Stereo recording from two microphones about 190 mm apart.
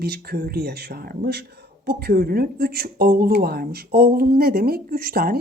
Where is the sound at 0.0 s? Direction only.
55° right (ahead or behind).